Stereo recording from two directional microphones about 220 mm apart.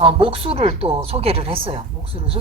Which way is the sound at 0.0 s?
25° right (ahead or behind).